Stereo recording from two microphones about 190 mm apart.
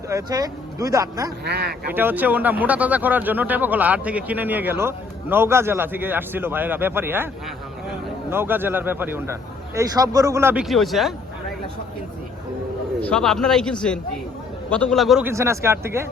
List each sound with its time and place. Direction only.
0.1 s speech: 20° right (ahead or behind)
1.5 s speech: 55° right (ahead or behind)
1.9 s speech: 10° right (ahead or behind)
8.3 s speech: 10° right (ahead or behind)
13.0 s a man's voice: 5° left (ahead or behind)
15.2 s speech: 15° right (ahead or behind)